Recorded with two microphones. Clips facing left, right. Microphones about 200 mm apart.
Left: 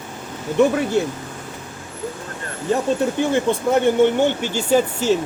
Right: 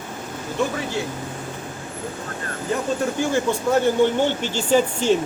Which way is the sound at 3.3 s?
20° left (ahead or behind).